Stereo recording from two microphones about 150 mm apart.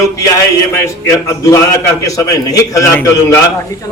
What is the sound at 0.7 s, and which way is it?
A man's voice, 20° left (ahead or behind).